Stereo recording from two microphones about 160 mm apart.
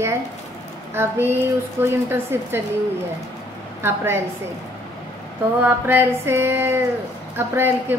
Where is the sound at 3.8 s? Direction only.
15° right (ahead or behind).